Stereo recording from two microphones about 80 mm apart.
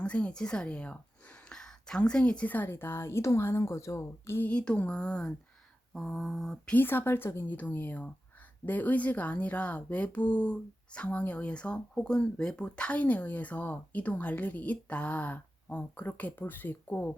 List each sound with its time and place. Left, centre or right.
0.0 s a woman's voice: centre; by 4.4 s left
4.4 s speech: centre
5.9 s mantra: centre
6.7 s speech: left